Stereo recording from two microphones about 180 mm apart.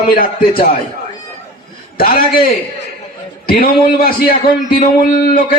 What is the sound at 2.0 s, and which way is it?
A man's voice, 55° left (ahead or behind).